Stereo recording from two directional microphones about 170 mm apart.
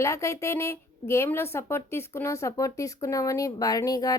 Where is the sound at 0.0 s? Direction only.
15° left (ahead or behind).